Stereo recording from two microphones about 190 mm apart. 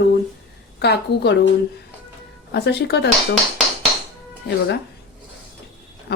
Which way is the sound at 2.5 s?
60° left (ahead or behind).